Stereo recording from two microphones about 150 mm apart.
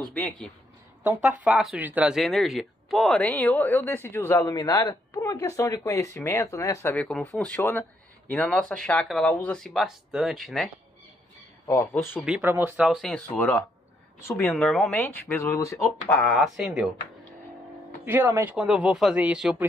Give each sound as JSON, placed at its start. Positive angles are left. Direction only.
{"t": 1.0, "sound": "speech", "side_deg": -10}
{"t": 11.6, "sound": "speech", "side_deg": 20}
{"t": 12.3, "sound": "speech", "side_deg": -10}
{"t": 16.3, "sound": "speech", "side_deg": 0}
{"t": 18.0, "sound": "speech", "side_deg": -15}